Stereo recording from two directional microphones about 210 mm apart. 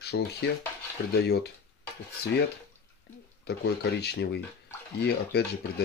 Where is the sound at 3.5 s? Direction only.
50° left (ahead or behind).